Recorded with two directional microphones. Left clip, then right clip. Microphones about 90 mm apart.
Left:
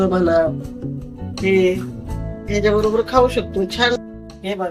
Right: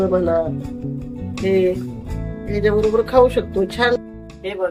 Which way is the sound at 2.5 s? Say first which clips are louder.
Even; 20° left (ahead or behind).